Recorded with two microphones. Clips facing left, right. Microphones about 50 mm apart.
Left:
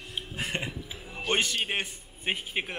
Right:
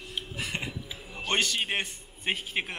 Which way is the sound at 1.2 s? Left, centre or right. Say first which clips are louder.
Even; centre.